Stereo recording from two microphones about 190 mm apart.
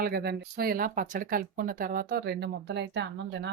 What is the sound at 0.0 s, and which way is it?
Speech, 55° right (ahead or behind).